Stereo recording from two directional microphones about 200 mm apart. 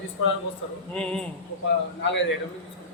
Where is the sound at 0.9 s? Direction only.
5° left (ahead or behind).